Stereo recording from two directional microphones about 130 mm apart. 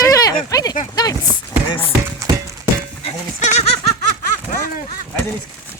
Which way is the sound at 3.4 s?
60° left (ahead or behind).